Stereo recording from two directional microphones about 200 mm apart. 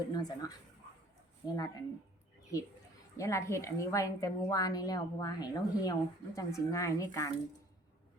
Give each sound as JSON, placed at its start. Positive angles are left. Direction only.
{"t": 0.1, "sound": "a woman's voice", "side_deg": 20}